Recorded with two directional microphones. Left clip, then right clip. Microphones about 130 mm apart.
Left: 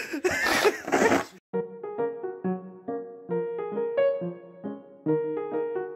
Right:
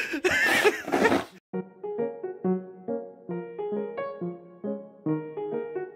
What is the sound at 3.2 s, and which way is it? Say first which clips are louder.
Music: left 6 dB; 15° left (ahead or behind).